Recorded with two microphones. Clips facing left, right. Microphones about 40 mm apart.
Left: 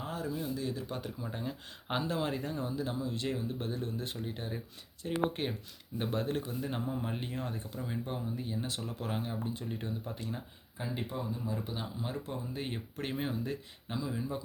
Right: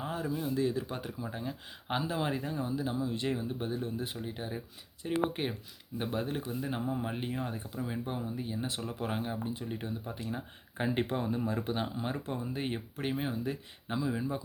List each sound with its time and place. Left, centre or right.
0.0 s a sound: right
0.6 s speech: right
1.2 s speech: centre
8.6 s speech: right
10.8 s speech: right
11.7 s speech: right
12.5 s speech: centre